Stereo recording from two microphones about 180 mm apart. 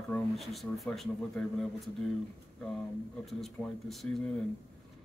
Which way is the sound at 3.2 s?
Centre (ahead or behind).